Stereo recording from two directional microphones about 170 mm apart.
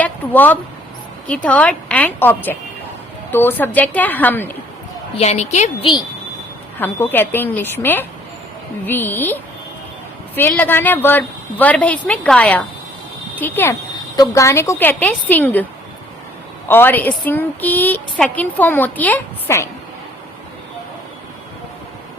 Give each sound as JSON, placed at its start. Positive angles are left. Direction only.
{"t": 0.0, "sound": "a sound", "side_deg": 10}
{"t": 1.3, "sound": "a woman's voice", "side_deg": 10}
{"t": 5.1, "sound": "a woman's voice", "side_deg": 40}
{"t": 6.7, "sound": "a woman's voice", "side_deg": 10}
{"t": 16.6, "sound": "a woman's voice", "side_deg": 10}